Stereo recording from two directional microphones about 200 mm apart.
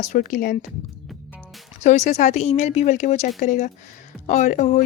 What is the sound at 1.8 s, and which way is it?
Speech, 35° left (ahead or behind).